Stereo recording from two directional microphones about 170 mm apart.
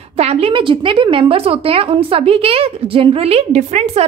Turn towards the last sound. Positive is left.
turn(degrees=-40)  # may be behind; listen again after turning